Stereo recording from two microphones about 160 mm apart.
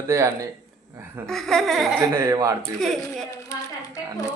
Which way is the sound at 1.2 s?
5° left (ahead or behind).